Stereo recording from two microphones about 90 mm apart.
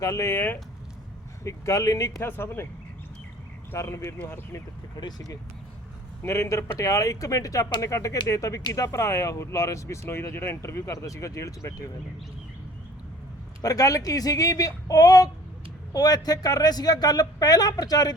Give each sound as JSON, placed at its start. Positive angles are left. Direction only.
{"t": 0.0, "sound": "speech", "side_deg": 35}
{"t": 1.5, "sound": "speech", "side_deg": 35}
{"t": 2.2, "sound": "speech", "side_deg": 25}
{"t": 3.7, "sound": "speech", "side_deg": 30}
{"t": 6.2, "sound": "speech", "side_deg": 30}
{"t": 13.6, "sound": "speech", "side_deg": 40}